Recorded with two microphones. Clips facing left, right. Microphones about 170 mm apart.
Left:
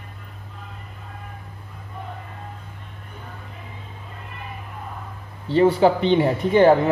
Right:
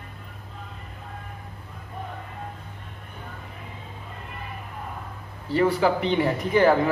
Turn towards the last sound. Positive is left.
turn(degrees=30)  # may be behind; listen again after turning